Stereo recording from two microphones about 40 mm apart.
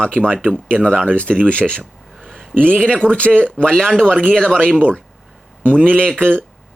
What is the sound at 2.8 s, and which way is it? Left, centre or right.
Speech, left.